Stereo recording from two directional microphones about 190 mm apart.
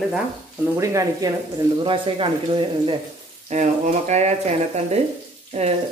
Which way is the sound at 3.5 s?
35° right (ahead or behind).